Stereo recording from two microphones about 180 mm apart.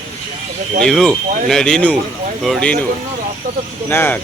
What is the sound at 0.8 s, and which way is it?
Speech, centre (ahead or behind).